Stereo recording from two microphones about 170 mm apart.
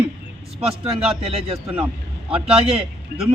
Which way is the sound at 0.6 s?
35° right (ahead or behind).